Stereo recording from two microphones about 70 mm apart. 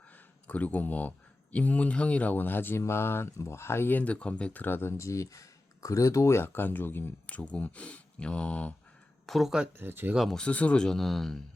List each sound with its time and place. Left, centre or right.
0.4 s speech: left
4.6 s speech: left
7.3 s speech: centre
9.2 s speech: centre
9.7 s speech: right
10.2 s speech: centre